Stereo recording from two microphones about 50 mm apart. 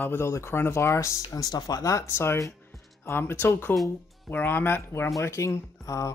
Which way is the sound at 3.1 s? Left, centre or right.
Left.